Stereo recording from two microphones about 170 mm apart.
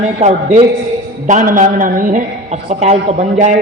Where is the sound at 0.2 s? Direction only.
40° right (ahead or behind).